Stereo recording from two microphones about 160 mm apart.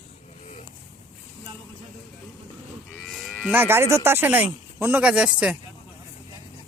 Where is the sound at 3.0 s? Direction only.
Centre (ahead or behind).